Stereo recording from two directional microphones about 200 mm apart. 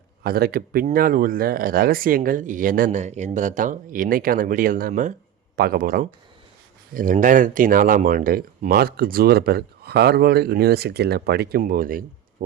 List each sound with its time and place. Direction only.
0.2 s speech: 50° right (ahead or behind)